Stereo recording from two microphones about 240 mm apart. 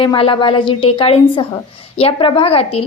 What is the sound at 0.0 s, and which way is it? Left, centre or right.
A woman's voice, left.